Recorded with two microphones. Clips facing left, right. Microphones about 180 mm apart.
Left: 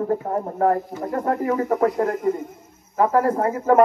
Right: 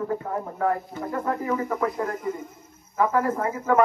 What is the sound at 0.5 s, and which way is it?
Speech, 40° left (ahead or behind).